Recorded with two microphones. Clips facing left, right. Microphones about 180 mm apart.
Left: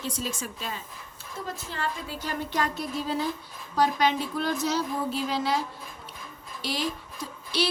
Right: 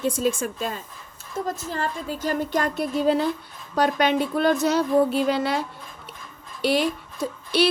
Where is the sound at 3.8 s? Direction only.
65° right (ahead or behind).